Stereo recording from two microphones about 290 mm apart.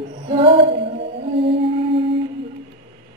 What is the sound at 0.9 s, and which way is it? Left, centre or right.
Whale vocalization, centre.